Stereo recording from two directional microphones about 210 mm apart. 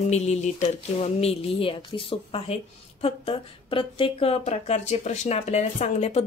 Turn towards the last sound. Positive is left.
turn(degrees=30)  # may be behind; listen again after turning